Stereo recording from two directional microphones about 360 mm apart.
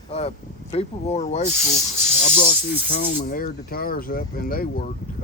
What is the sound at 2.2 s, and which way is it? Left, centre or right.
Snake, centre.